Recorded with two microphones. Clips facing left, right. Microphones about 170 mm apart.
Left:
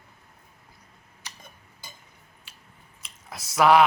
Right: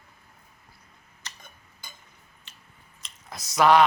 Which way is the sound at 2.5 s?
10° left (ahead or behind).